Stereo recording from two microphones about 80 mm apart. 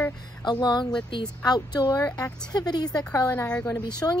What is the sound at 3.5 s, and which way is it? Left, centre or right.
Speech, centre.